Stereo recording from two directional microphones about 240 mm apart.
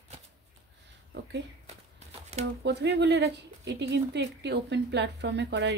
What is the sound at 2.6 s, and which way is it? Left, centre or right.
Speech, right.